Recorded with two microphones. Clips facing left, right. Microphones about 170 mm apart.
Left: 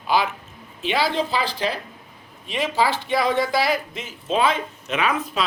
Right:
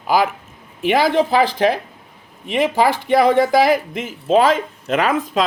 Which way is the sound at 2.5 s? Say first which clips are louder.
Right 6 dB; 55° right (ahead or behind).